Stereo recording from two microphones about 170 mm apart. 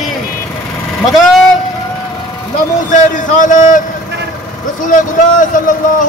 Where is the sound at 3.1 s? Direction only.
50° left (ahead or behind).